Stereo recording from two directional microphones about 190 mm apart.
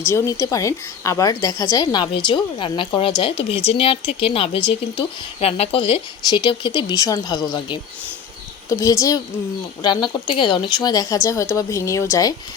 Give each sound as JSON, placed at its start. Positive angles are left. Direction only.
{"t": 0.1, "sound": "a woman's voice", "side_deg": 15}